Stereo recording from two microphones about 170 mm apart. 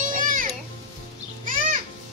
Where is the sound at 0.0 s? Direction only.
50° right (ahead or behind).